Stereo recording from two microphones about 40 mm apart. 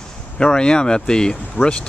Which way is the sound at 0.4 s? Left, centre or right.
Left.